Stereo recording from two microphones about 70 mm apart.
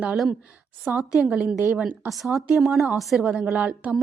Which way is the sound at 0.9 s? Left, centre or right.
Right.